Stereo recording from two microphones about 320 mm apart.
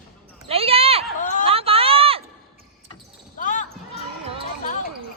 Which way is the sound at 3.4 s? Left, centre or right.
Left.